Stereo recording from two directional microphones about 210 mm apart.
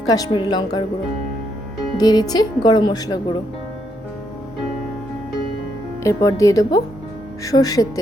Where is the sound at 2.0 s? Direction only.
20° left (ahead or behind).